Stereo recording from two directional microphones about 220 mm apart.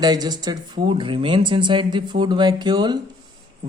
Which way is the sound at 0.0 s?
20° right (ahead or behind).